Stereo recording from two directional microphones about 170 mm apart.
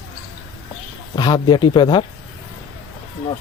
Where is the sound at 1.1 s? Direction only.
25° left (ahead or behind).